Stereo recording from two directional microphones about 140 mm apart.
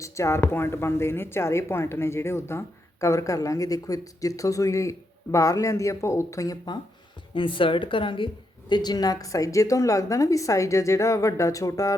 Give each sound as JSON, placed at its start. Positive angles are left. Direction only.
{"t": 0.0, "sound": "speech", "side_deg": 20}
{"t": 7.3, "sound": "a woman's voice", "side_deg": 35}